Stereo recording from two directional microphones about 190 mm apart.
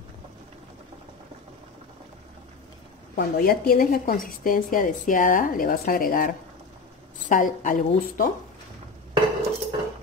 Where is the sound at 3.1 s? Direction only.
50° left (ahead or behind).